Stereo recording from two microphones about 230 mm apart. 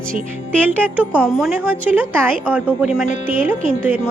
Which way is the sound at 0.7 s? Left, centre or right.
Centre.